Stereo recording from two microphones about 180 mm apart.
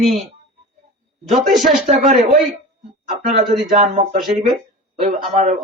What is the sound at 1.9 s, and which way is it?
Speech, 40° right (ahead or behind).